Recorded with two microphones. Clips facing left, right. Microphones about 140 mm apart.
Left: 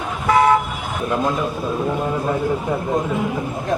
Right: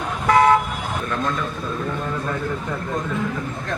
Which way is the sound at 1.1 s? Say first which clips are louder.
Left 6 dB; 20° left (ahead or behind).